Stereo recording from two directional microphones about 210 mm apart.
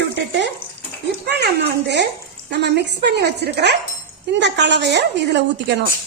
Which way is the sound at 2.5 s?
55° right (ahead or behind).